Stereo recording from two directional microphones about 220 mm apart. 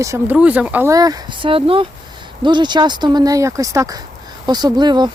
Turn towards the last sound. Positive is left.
turn(degrees=-20)  # may be behind; listen again after turning